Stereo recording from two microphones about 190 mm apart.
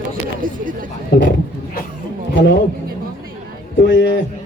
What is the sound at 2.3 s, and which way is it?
Speech, 75° left (ahead or behind).